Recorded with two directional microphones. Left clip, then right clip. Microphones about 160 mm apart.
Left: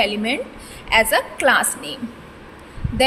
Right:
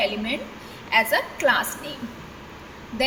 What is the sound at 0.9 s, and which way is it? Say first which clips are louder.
Speech: left 4 dB; 60° left (ahead or behind).